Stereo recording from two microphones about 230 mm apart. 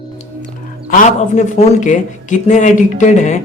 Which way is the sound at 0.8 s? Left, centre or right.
Left.